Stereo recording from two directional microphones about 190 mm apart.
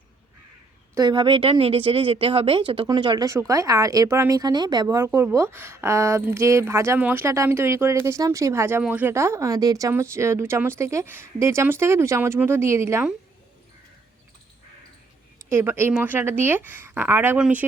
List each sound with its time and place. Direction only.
0.9 s speech: 25° right (ahead or behind)
15.4 s speech: 15° right (ahead or behind)